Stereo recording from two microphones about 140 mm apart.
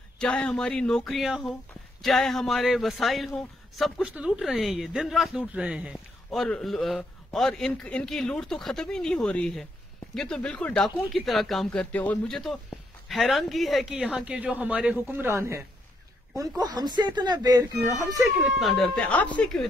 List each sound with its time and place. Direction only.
0.2 s a man's voice: 5° left (ahead or behind); by 18.3 s 25° right (ahead or behind)
18.4 s a man's voice: centre (ahead or behind)